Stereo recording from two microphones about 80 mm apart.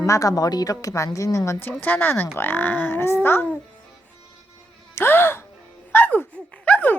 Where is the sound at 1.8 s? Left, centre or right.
Left.